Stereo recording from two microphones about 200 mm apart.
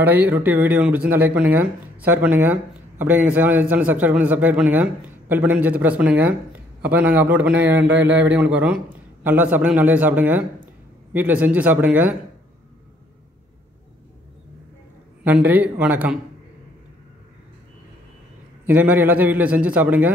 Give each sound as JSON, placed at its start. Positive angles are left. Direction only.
{"t": 0.0, "sound": "a man's voice", "side_deg": -10}
{"t": 15.2, "sound": "a man's voice", "side_deg": -10}
{"t": 18.7, "sound": "a man's voice", "side_deg": -10}